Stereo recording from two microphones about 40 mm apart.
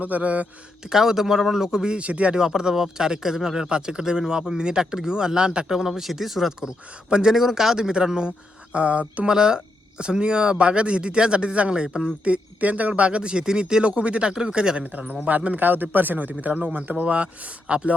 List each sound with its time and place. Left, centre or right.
0.0 s speech: right
0.9 s speech: centre
2.0 s speech: right
2.3 s speech: centre
5.7 s speech: centre
8.7 s speech: right
9.3 s speech: centre
12.3 s speech: right
12.9 s speech: right
13.8 s speech: right
15.0 s speech: right
17.7 s speech: right